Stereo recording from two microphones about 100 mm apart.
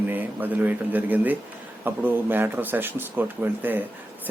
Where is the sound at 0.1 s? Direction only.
20° right (ahead or behind).